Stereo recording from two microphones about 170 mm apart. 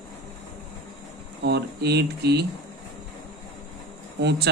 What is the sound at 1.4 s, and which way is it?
Speech, 75° right (ahead or behind).